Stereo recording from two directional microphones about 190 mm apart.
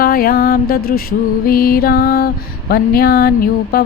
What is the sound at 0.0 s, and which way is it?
Music, 50° left (ahead or behind).